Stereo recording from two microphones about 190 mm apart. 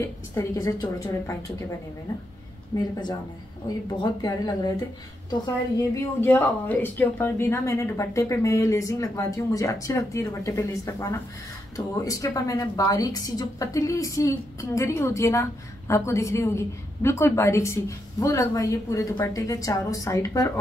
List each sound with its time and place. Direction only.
0.0 s speech: 15° left (ahead or behind)
2.7 s speech: 20° left (ahead or behind)